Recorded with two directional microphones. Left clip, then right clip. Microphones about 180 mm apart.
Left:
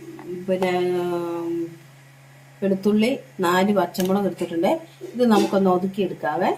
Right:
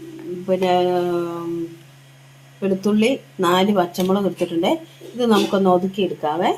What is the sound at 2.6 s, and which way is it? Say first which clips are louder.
Speech: right 2 dB; 30° right (ahead or behind).